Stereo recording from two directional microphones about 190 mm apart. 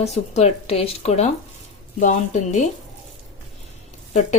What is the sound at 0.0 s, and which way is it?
Speech, 35° left (ahead or behind).